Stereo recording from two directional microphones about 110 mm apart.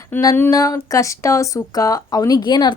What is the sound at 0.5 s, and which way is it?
A woman's voice, 30° left (ahead or behind).